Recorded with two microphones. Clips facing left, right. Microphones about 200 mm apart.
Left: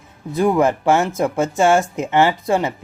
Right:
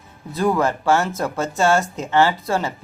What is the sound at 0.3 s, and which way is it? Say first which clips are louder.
Speech: left 3 dB; 15° left (ahead or behind).